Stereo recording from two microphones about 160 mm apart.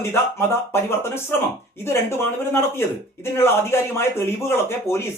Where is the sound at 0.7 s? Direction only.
15° left (ahead or behind).